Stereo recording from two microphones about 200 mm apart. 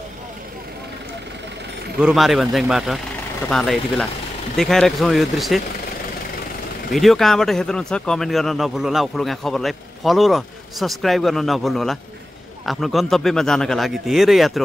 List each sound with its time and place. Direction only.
2.0 s speech: 5° right (ahead or behind)
6.9 s speech: centre (ahead or behind)